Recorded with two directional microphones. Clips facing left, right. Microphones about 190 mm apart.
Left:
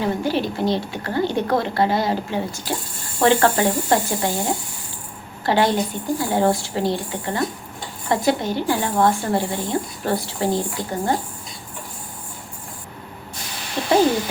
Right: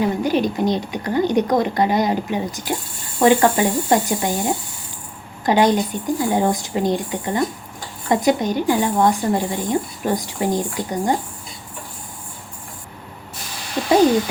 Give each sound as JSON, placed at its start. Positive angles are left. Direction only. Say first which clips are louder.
{"t": 0.0, "sound": "speech", "louder": "right 3 dB", "side_deg": -15}